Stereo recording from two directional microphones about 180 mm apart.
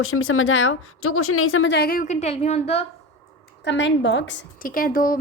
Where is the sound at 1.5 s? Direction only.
90° left; by 2.8 s 35° left (ahead or behind).